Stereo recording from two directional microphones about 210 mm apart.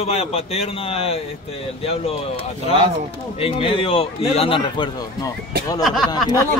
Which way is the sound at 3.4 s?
25° left (ahead or behind).